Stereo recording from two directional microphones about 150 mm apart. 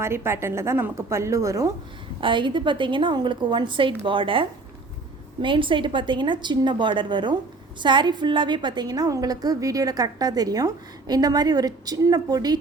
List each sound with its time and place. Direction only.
0.0 s a woman's voice: 15° right (ahead or behind)
2.2 s a woman's voice: 35° right (ahead or behind)